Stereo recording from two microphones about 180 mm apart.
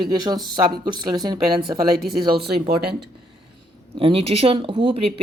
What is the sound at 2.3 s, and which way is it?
Speech, 65° right (ahead or behind).